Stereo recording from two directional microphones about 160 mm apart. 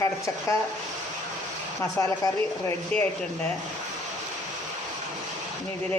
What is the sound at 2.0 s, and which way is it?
Speech, 20° left (ahead or behind).